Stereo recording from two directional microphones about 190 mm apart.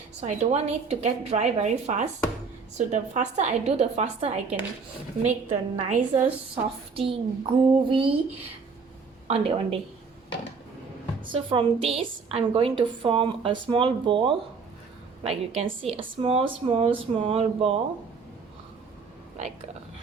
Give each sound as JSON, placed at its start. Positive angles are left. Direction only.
{"t": 0.2, "sound": "a woman's voice", "side_deg": -35}
{"t": 9.2, "sound": "a woman's voice", "side_deg": -30}
{"t": 11.3, "sound": "a woman's voice", "side_deg": -30}